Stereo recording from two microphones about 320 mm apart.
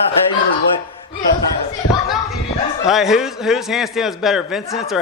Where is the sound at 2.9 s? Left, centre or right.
Centre.